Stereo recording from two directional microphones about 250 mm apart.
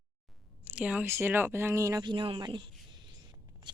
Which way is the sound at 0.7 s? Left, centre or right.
Centre.